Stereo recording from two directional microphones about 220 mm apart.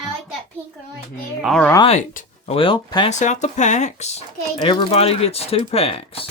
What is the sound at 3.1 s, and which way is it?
Speech, 35° left (ahead or behind).